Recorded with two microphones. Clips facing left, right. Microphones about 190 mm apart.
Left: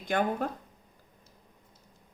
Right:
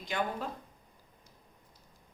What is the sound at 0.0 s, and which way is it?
Speech, 55° left (ahead or behind).